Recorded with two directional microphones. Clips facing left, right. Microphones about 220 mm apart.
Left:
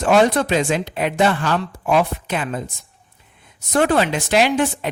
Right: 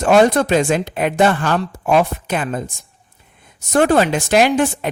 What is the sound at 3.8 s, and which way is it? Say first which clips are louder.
A man's voice: right 3 dB; 45° right (ahead or behind).